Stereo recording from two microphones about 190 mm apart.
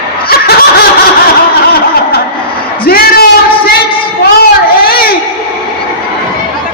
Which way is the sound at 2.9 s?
55° left (ahead or behind).